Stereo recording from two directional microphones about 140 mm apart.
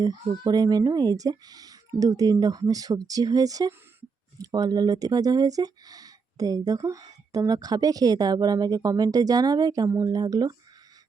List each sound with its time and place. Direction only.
0.0 s speech: 30° right (ahead or behind)